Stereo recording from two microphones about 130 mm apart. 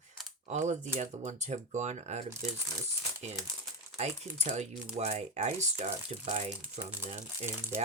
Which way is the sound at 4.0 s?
60° right (ahead or behind).